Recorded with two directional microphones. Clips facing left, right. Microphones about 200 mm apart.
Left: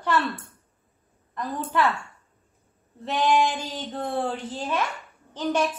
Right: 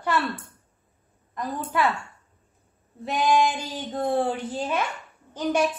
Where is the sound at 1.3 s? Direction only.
15° right (ahead or behind).